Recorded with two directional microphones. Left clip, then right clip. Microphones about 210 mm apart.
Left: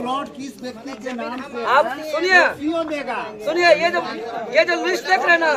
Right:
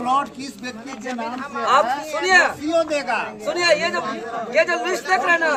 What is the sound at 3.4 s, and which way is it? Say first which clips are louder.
Speech: left 4 dB; centre (ahead or behind).